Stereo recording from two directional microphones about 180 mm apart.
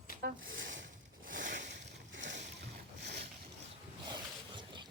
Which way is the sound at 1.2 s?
45° right (ahead or behind).